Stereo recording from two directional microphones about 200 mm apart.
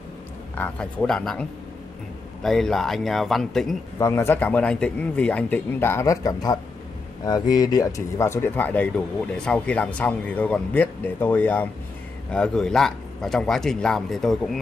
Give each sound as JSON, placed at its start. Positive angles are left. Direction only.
{"t": 0.6, "sound": "a man's voice", "side_deg": 5}
{"t": 4.0, "sound": "a man's voice", "side_deg": 10}